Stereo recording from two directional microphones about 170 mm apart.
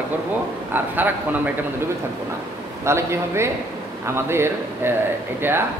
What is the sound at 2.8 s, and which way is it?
A man's voice, 15° right (ahead or behind).